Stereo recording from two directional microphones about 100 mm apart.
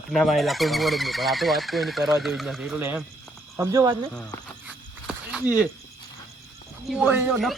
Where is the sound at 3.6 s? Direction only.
35° right (ahead or behind).